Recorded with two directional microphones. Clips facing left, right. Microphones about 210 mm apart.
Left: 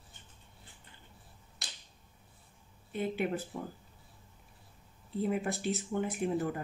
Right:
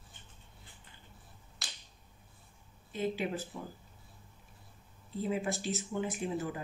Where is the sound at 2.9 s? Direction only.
60° left (ahead or behind).